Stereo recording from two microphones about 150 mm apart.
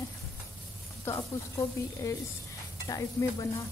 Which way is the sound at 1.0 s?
20° left (ahead or behind).